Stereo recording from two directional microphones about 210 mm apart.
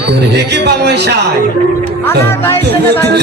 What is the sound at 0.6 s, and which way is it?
Speech, 50° right (ahead or behind).